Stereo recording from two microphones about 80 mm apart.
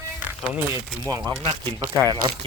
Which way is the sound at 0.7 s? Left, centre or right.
Right.